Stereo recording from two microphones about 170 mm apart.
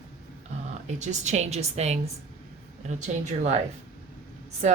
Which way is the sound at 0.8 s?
45° right (ahead or behind).